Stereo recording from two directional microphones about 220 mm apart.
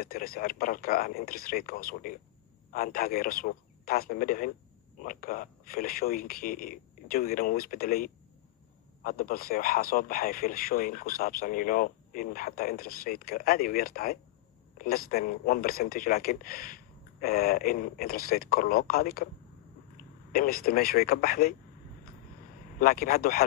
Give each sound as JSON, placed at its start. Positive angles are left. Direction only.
{"t": 0.0, "sound": "speech", "side_deg": 40}
{"t": 20.3, "sound": "speech", "side_deg": 40}
{"t": 22.8, "sound": "speech", "side_deg": 40}